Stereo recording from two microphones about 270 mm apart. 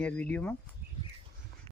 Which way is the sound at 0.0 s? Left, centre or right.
Centre.